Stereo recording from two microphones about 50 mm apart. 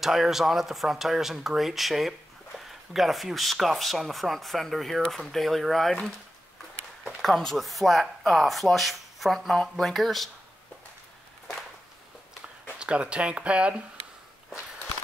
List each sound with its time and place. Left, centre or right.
0.0 s speech: centre
7.2 s speech: centre
12.7 s speech: right